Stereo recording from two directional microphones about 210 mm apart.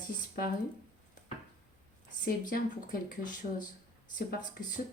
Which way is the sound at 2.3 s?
45° left (ahead or behind).